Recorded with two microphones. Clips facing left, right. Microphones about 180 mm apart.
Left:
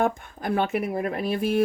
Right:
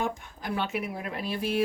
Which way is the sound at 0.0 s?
55° left (ahead or behind).